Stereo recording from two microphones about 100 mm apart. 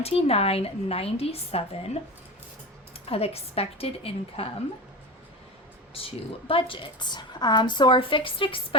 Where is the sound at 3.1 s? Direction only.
85° left.